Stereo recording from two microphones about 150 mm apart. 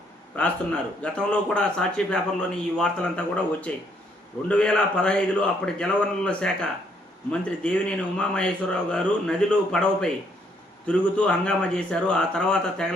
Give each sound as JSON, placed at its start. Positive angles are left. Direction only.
{"t": 0.3, "sound": "speech", "side_deg": 10}